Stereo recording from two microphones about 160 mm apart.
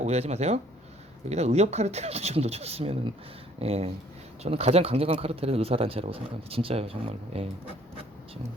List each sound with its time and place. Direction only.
0.0 s speech: 40° right (ahead or behind)